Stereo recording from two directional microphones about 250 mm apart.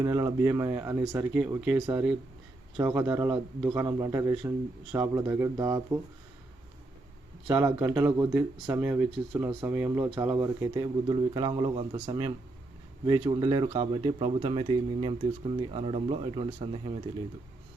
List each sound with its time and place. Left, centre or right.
0.0 s a man's voice: centre
7.5 s a man's voice: centre